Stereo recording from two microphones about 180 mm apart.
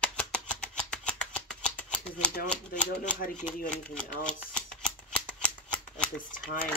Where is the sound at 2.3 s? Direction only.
45° left (ahead or behind).